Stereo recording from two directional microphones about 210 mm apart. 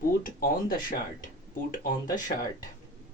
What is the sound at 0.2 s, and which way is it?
Speech, 45° left (ahead or behind).